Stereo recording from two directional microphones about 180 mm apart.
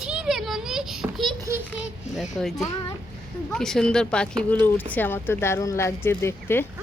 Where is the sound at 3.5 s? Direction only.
5° left (ahead or behind).